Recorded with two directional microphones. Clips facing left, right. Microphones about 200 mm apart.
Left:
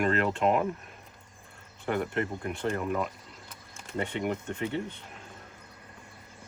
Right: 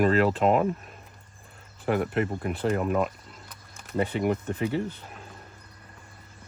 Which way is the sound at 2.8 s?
50° right (ahead or behind).